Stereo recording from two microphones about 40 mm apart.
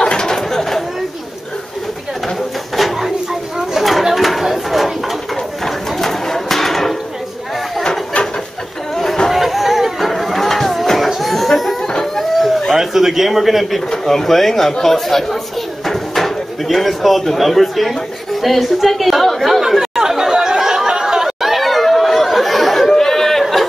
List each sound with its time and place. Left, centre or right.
0.0 s a sound: centre
3.7 s chatter: centre
5.9 s music: centre
8.9 s chatter: centre
9.3 s chatter: centre
12.2 s a sound: centre
12.7 s a man's voice: centre
15.9 s drawer open or close: centre
19.8 s chatter: centre